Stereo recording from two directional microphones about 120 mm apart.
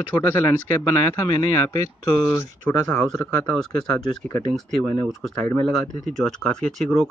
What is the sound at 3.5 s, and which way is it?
Speech, 5° left (ahead or behind).